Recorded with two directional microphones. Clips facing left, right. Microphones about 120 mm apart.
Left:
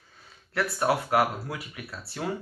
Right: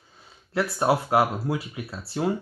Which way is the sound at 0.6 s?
25° right (ahead or behind).